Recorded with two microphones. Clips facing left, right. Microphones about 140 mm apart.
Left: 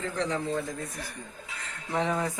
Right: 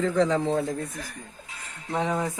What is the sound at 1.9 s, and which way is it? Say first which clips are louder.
Speech: right 2 dB; 15° right (ahead or behind).